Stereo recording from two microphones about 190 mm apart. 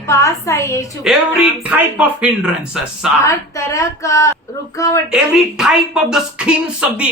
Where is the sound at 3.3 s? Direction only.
15° left (ahead or behind).